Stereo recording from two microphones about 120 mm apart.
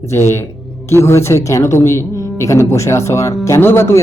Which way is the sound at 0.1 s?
20° left (ahead or behind).